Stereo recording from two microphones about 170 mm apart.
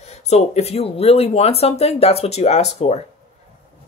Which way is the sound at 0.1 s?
40° left (ahead or behind).